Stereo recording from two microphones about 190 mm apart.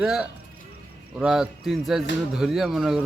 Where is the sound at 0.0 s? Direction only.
5° right (ahead or behind).